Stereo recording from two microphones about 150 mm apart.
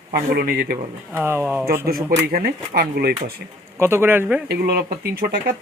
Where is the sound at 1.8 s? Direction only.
80° right.